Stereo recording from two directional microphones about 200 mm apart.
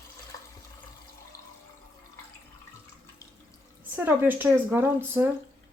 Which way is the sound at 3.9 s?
10° right (ahead or behind).